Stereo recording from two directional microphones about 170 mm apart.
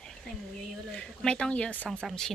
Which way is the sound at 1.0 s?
5° left (ahead or behind).